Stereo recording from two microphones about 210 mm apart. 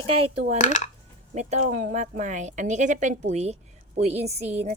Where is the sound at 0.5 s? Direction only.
35° left (ahead or behind).